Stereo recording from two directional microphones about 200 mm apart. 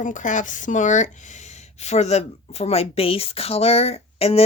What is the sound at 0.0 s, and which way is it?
Speech, 40° left (ahead or behind).